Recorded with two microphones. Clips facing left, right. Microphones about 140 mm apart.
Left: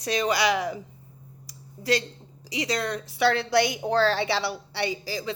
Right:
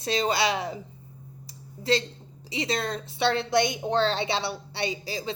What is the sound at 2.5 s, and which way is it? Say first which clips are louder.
Speech: left 1 dB; 25° right (ahead or behind).